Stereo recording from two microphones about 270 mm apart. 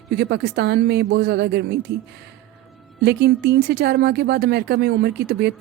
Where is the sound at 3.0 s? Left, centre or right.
Right.